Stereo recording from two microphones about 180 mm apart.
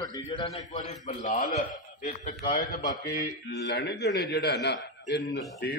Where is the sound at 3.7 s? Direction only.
65° left (ahead or behind).